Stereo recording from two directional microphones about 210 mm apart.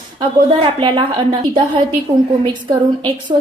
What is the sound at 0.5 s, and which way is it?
A woman's voice, 20° right (ahead or behind).